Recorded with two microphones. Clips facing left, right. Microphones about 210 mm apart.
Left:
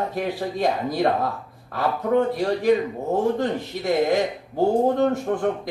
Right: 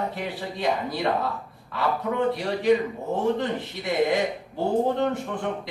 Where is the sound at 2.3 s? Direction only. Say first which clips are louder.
Left 2 dB; 40° left (ahead or behind).